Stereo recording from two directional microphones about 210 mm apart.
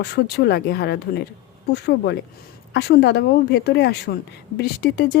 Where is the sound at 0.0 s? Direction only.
50° left (ahead or behind).